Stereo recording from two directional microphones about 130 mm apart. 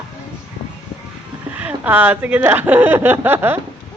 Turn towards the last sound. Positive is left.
turn(degrees=-15)  # may be behind; listen again after turning